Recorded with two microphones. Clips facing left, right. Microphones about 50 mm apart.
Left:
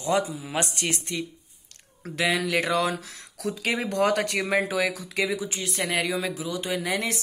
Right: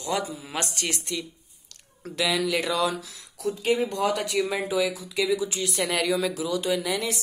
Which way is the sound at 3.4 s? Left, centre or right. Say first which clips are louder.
Right 3 dB; left.